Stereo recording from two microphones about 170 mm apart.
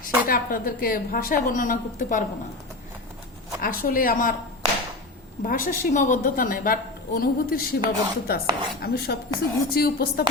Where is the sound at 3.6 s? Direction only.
55° left (ahead or behind).